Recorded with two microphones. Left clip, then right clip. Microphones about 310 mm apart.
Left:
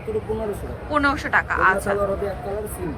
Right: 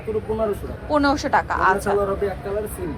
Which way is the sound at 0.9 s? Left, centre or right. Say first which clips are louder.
Right 1 dB; centre.